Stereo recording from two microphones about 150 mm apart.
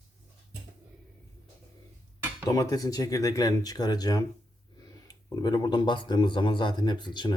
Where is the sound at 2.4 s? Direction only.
25° left (ahead or behind).